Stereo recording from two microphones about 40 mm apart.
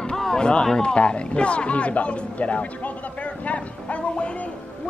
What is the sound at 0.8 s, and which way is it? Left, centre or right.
Speech, left.